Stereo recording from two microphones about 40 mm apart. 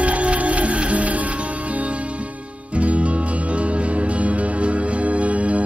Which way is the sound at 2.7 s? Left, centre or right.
Right.